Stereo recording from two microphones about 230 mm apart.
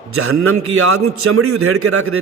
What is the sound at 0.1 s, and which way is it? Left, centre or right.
A man's voice, right.